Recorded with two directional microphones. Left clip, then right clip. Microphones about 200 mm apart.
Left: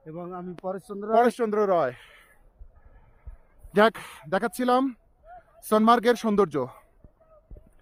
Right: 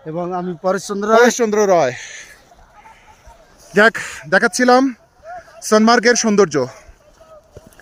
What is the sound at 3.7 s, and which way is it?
Speech, 25° left (ahead or behind).